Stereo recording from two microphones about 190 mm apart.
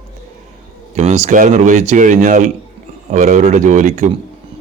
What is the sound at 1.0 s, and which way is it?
A man's voice, 35° right (ahead or behind).